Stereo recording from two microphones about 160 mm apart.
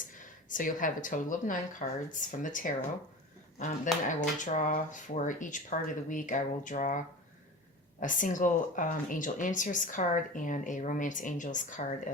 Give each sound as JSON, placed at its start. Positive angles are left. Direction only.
{"t": 0.4, "sound": "speech", "side_deg": 55}
{"t": 4.0, "sound": "speech", "side_deg": 50}
{"t": 8.0, "sound": "speech", "side_deg": 55}